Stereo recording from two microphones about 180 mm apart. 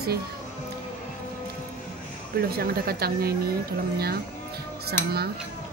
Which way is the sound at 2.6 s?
60° right (ahead or behind).